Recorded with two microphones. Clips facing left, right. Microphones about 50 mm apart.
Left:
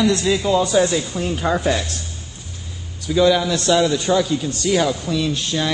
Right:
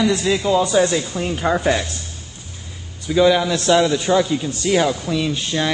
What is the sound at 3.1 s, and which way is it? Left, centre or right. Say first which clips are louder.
Speech: right 1 dB; centre.